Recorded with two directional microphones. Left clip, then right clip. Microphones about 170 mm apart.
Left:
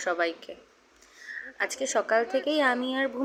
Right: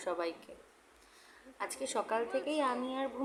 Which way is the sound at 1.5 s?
15° left (ahead or behind).